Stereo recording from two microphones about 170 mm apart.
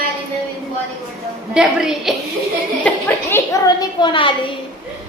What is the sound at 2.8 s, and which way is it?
A woman's voice, 15° left (ahead or behind).